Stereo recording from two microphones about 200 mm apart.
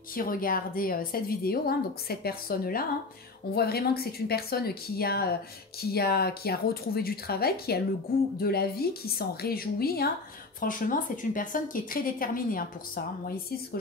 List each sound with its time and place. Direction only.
0.1 s a woman's voice: 45° left (ahead or behind)